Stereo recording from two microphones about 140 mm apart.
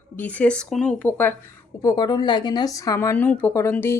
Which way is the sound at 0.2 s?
10° left (ahead or behind).